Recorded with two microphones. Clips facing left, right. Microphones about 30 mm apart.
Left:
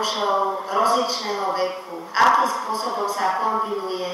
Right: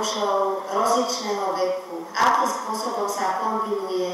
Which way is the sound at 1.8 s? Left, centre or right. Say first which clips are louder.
Right 1 dB; centre.